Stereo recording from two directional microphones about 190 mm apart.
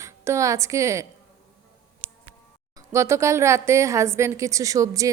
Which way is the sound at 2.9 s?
15° right (ahead or behind).